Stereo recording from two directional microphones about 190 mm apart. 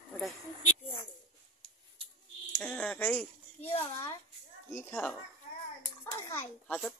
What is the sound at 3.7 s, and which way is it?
Speech, 30° left (ahead or behind).